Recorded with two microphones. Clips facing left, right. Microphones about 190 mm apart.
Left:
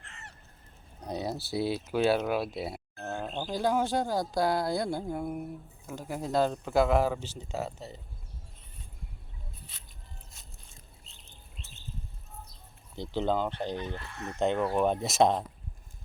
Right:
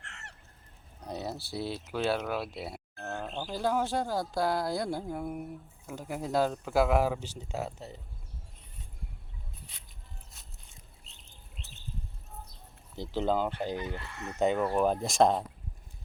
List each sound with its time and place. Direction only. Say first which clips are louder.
0.0 s goose: even; 75° right (ahead or behind)
1.1 s speech: left 4 dB; centre (ahead or behind)
3.4 s speech: left 2 dB; centre (ahead or behind)
13.0 s speech: even; 5° right (ahead or behind)